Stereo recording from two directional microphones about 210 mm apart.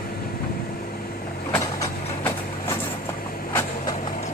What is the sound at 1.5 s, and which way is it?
Vehicle, 15° left (ahead or behind).